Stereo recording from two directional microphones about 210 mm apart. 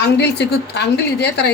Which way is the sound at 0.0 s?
50° left (ahead or behind).